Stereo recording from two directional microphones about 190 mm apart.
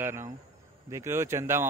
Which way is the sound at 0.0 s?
10° right (ahead or behind).